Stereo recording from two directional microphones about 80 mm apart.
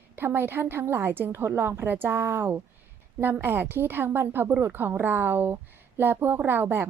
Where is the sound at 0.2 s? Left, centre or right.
Right.